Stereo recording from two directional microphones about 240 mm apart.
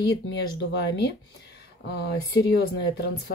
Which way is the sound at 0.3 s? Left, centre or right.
Left.